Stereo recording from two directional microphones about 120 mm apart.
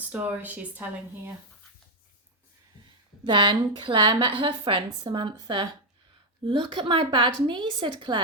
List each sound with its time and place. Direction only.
0.1 s speech: 15° right (ahead or behind)
3.2 s a woman's voice: 45° right (ahead or behind)